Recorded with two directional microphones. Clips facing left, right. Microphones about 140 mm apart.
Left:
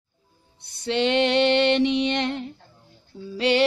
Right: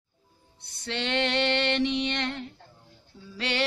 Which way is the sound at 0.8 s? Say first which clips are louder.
Left 8 dB; 15° left (ahead or behind).